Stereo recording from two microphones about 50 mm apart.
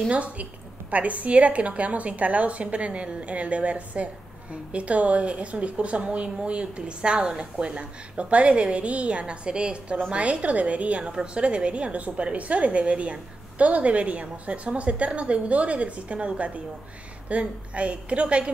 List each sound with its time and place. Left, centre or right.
0.1 s a woman's voice: right
9.9 s a woman's voice: right